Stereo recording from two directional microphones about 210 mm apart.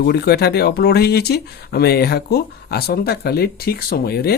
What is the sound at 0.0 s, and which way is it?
Speech, 50° left (ahead or behind).